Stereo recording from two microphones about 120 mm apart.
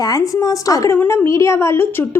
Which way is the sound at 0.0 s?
30° left (ahead or behind).